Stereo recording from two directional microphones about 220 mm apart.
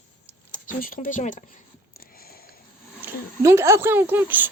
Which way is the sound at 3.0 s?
10° right (ahead or behind).